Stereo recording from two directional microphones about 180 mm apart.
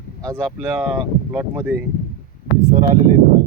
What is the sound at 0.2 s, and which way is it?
Speech, 15° right (ahead or behind).